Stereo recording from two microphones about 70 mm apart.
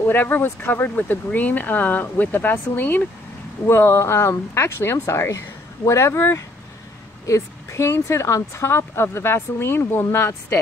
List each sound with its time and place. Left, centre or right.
0.1 s a woman's voice: left